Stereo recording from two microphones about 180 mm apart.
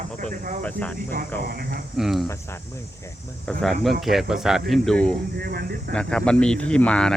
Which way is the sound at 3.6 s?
Centre (ahead or behind).